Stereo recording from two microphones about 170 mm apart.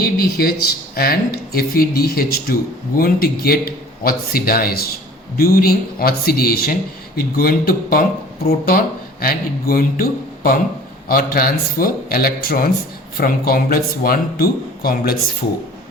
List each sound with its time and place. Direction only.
0.0 s speech: 60° left (ahead or behind)